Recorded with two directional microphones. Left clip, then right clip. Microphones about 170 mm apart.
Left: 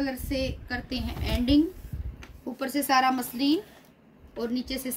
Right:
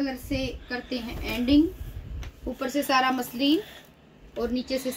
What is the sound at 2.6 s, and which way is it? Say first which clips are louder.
Speech: even; 25° left (ahead or behind).